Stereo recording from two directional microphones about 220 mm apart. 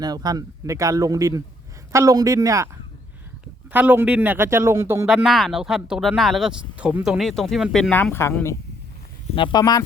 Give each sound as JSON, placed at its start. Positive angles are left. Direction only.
{"t": 0.0, "sound": "speech", "side_deg": -20}
{"t": 3.7, "sound": "speech", "side_deg": -5}
{"t": 5.0, "sound": "speech", "side_deg": 0}
{"t": 9.3, "sound": "speech", "side_deg": 20}